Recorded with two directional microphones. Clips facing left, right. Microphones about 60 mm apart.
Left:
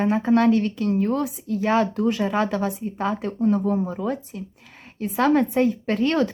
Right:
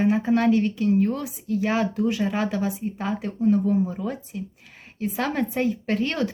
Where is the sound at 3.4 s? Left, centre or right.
Left.